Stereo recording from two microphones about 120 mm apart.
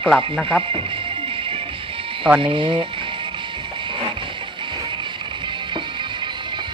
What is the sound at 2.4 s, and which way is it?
Speech, 45° right (ahead or behind).